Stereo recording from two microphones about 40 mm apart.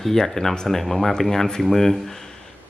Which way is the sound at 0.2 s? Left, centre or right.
Centre.